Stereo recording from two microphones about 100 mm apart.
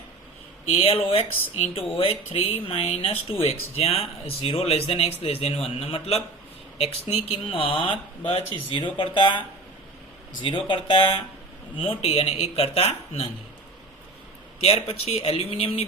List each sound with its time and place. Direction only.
0.7 s speech: 80° left
3.4 s speech: 85° left
5.6 s a man's voice: 75° left (ahead or behind); by 11.2 s 60° left (ahead or behind)
11.8 s a man's voice: 75° left (ahead or behind)
14.6 s speech: 75° left (ahead or behind)